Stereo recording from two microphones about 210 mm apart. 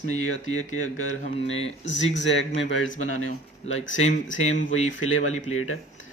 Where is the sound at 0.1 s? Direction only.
75° left (ahead or behind).